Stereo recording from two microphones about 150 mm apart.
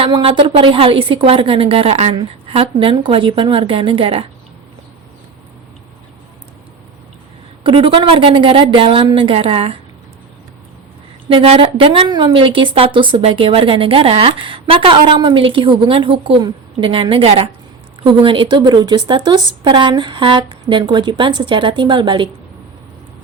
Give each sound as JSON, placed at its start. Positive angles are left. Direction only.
{"t": 0.0, "sound": "a woman's voice", "side_deg": -35}
{"t": 7.6, "sound": "a woman's voice", "side_deg": -35}
{"t": 11.3, "sound": "a woman's voice", "side_deg": -40}